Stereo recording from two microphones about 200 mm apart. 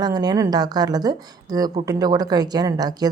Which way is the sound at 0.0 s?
20° right (ahead or behind).